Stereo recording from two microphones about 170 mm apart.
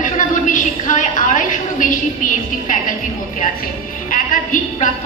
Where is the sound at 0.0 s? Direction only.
50° left (ahead or behind).